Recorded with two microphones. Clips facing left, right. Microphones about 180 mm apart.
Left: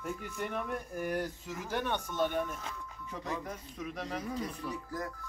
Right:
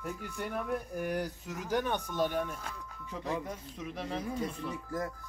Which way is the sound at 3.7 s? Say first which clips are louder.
Right 1 dB; 25° right (ahead or behind).